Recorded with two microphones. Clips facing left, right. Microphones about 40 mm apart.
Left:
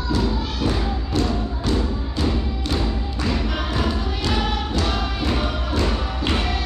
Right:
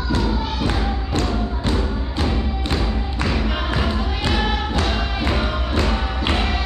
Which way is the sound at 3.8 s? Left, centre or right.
Centre.